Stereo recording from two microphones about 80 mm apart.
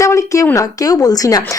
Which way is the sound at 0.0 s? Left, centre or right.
Left.